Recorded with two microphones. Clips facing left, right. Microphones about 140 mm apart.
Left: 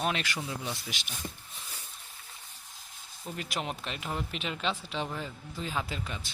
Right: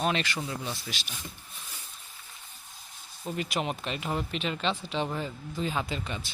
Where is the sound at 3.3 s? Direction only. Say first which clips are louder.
Right 4 dB; 5° right (ahead or behind).